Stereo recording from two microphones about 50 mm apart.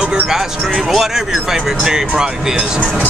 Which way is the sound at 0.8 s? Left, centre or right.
Centre.